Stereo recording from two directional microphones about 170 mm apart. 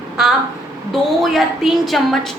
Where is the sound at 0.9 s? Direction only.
Centre (ahead or behind).